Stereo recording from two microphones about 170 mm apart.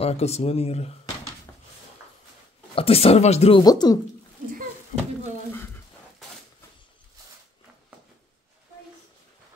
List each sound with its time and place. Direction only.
0.0 s speech: 35° left (ahead or behind)
2.7 s speech: 35° left (ahead or behind)
3.6 s speech: 25° left (ahead or behind)